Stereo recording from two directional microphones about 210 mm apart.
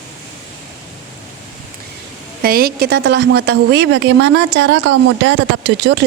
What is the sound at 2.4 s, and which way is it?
A woman's voice, 45° right (ahead or behind).